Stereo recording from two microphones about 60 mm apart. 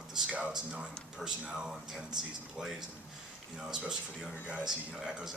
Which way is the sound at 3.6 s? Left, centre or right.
Centre.